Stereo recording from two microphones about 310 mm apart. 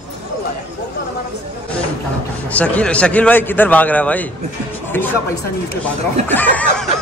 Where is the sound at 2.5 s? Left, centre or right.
Centre.